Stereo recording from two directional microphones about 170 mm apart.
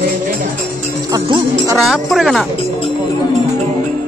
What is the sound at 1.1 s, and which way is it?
Music, 20° right (ahead or behind).